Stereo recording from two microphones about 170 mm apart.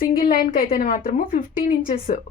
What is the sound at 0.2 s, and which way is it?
A woman's voice, 60° left (ahead or behind).